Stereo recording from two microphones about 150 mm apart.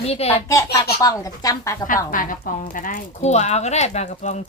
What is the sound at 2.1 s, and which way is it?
Speech, 65° left (ahead or behind).